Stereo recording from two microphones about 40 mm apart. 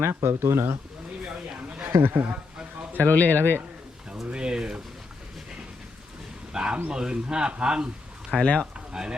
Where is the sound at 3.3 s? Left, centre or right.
Right.